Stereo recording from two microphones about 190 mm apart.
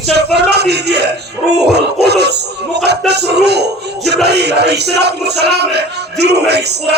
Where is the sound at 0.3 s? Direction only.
60° right (ahead or behind).